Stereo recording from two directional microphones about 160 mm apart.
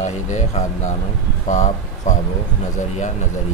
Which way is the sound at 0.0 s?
45° left (ahead or behind).